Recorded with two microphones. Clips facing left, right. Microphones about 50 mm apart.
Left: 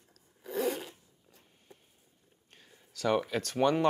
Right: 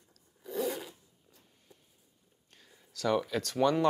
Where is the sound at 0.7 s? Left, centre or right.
Left.